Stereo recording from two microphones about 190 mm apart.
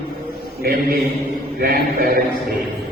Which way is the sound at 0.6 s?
55° right (ahead or behind).